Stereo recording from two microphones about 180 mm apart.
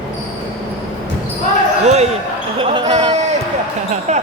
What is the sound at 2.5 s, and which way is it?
Basketball bounce, 25° right (ahead or behind).